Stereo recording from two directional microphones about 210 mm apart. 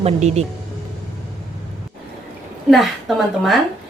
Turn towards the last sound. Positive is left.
turn(degrees=0)  # may be behind; listen again after turning